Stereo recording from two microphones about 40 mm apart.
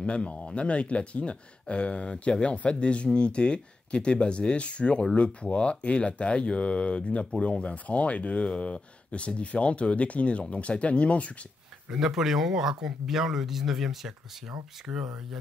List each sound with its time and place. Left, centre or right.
0.0 s speech: left
12.0 s speech: centre